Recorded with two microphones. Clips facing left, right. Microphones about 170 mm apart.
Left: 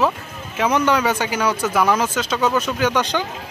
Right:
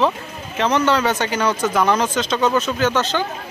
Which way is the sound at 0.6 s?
10° left (ahead or behind).